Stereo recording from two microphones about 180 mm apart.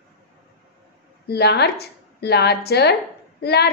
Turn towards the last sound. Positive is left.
turn(degrees=65)  # may be behind; listen again after turning